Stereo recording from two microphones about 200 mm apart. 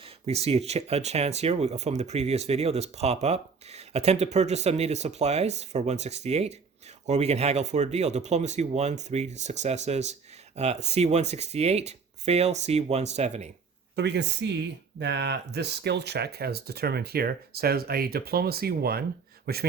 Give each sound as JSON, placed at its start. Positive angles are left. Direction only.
{"t": 0.0, "sound": "speech", "side_deg": -30}
{"t": 13.9, "sound": "speech", "side_deg": -60}